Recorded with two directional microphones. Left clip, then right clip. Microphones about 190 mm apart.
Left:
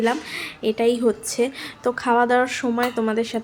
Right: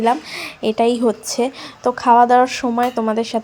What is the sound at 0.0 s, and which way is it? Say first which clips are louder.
A woman's voice: right 5 dB; 20° right (ahead or behind).